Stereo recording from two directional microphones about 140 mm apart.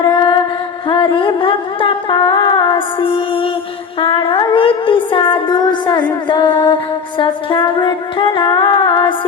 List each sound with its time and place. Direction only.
0.1 s music: 35° left (ahead or behind)
0.9 s a sound: 35° left (ahead or behind)
1.4 s music: 40° left (ahead or behind)